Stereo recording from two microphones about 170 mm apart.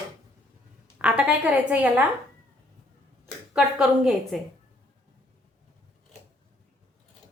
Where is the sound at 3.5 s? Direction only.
5° right (ahead or behind).